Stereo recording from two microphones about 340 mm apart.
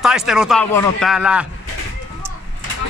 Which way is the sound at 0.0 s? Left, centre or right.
Centre.